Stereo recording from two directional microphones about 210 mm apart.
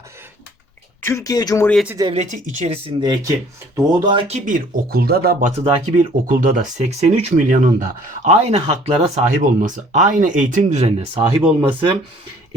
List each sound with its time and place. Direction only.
1.0 s speech: 15° left (ahead or behind)
1.7 s speech: 5° right (ahead or behind)
2.1 s speech: 30° right (ahead or behind)